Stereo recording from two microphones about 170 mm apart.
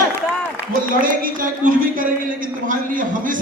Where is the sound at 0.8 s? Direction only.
55° right (ahead or behind).